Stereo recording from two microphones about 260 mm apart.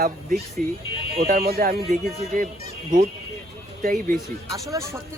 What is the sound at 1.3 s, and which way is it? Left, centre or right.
Speech, right.